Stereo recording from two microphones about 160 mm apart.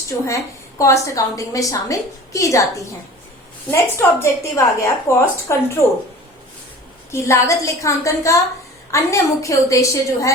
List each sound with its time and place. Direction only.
0.8 s a woman's voice: 20° left (ahead or behind)
7.1 s a woman's voice: 20° left (ahead or behind)